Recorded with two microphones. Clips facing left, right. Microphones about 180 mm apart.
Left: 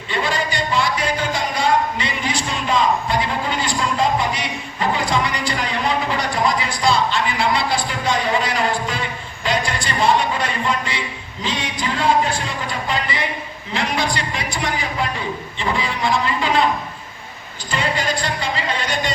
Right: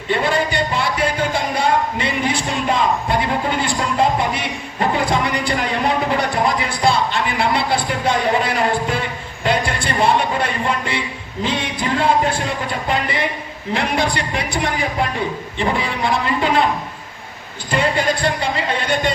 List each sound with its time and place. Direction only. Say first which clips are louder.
0.1 s music: right 4 dB; 55° right (ahead or behind)
12.9 s speech: right 4 dB; 55° right (ahead or behind)
17.7 s speech: right 4 dB; 55° right (ahead or behind)